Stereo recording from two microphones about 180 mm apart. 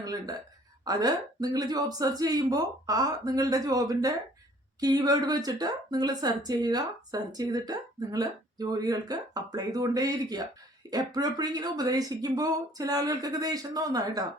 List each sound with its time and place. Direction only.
0.0 s a woman's voice: 20° right (ahead or behind)